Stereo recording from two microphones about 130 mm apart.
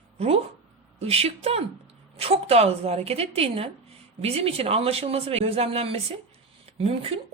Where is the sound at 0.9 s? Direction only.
50° right (ahead or behind).